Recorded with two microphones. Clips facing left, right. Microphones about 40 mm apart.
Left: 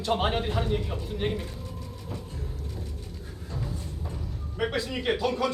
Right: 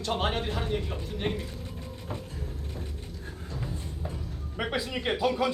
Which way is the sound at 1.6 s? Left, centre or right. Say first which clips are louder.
Even; right.